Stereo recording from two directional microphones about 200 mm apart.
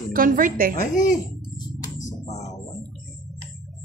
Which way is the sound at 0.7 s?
40° left (ahead or behind).